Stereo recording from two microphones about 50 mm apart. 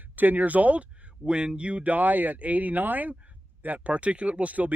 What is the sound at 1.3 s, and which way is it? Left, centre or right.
Speech, centre.